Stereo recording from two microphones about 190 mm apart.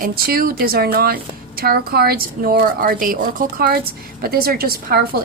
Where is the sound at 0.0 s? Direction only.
50° right (ahead or behind).